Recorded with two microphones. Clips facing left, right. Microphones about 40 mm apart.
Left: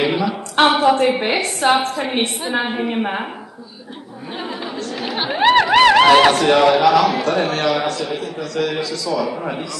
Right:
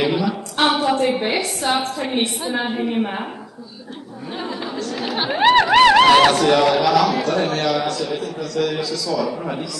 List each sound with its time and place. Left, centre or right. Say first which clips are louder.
0.0 s a sound: left 1 dB; centre
0.7 s a woman's voice: left 4 dB; left
2.0 s a woman's voice: left 1 dB; left
4.4 s speech: even; centre
7.5 s a woman's voice: left 1 dB; left
9.1 s a woman's voice: left 1 dB; left